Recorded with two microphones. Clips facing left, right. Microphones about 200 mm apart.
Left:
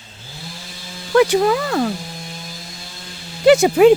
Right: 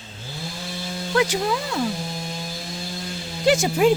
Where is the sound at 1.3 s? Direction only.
65° left (ahead or behind).